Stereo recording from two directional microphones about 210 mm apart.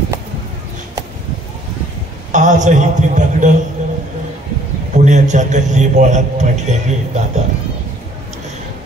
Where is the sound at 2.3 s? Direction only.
35° right (ahead or behind).